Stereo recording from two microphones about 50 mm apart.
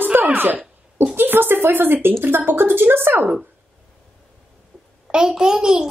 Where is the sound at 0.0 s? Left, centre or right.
Right.